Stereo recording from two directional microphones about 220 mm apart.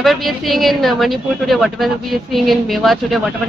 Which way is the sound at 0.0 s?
Centre (ahead or behind).